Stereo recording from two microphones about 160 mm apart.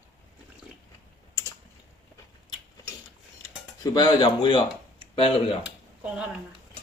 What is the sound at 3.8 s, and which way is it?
Speech, 25° left (ahead or behind).